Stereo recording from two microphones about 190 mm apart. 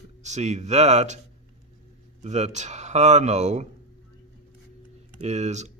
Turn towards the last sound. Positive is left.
turn(degrees=-35)  # may be behind; listen again after turning